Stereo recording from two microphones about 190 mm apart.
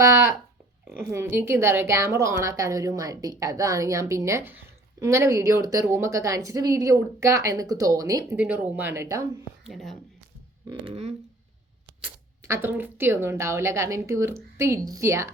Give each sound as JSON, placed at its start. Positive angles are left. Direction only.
{"t": 1.1, "sound": "a woman's voice", "side_deg": -10}
{"t": 9.6, "sound": "speech", "side_deg": 0}
{"t": 10.7, "sound": "speech", "side_deg": -30}
{"t": 12.5, "sound": "a woman's voice", "side_deg": -10}